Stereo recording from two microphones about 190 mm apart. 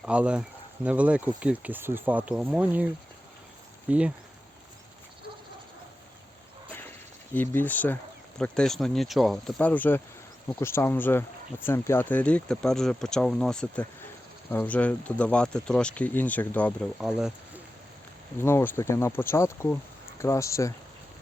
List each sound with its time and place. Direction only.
0.0 s speech: 5° right (ahead or behind)
7.3 s speech: 10° left (ahead or behind)
17.1 s speech: 5° right (ahead or behind)
18.3 s speech: 15° left (ahead or behind)